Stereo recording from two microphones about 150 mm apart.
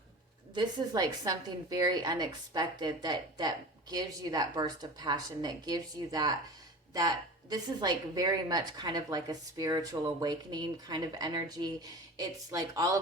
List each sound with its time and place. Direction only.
0.5 s a woman's voice: 25° right (ahead or behind)
7.5 s a woman's voice: 25° right (ahead or behind)